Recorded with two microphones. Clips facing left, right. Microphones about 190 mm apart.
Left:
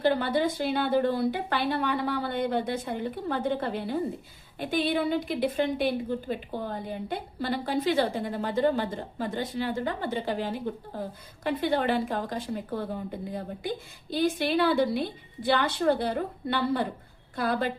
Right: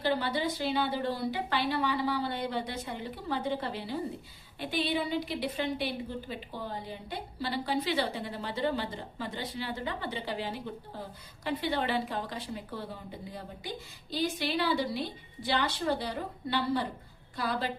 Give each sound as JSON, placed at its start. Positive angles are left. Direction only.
{"t": 0.0, "sound": "a woman's voice", "side_deg": 50}